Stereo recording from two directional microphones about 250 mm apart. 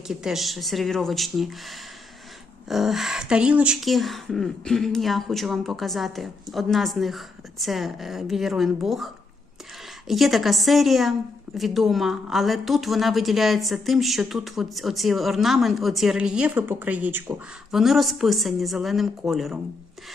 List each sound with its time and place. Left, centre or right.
0.1 s a woman's voice: centre
10.1 s a woman's voice: centre